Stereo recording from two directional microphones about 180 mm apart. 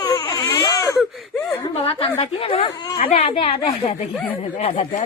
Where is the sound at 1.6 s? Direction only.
30° left (ahead or behind).